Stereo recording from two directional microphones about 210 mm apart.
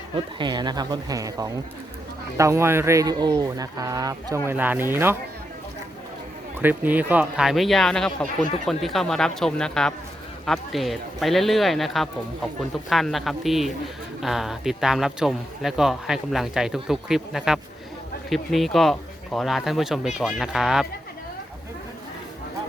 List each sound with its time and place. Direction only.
0.3 s speech: 20° right (ahead or behind)
6.6 s a man's voice: 10° right (ahead or behind)